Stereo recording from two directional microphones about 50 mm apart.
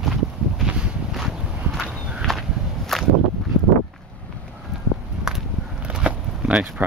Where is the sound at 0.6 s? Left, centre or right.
Centre.